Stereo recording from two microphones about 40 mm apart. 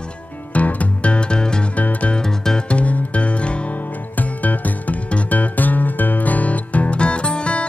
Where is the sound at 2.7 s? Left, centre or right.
Left.